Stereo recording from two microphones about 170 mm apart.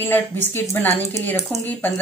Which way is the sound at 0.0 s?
10° left (ahead or behind).